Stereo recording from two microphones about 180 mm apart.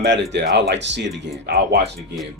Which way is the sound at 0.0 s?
75° right (ahead or behind).